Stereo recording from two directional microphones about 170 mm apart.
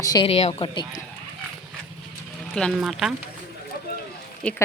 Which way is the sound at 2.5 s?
Centre (ahead or behind).